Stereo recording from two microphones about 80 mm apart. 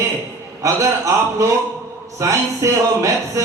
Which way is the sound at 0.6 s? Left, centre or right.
Right.